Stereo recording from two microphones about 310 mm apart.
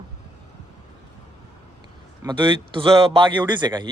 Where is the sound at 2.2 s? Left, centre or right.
Centre.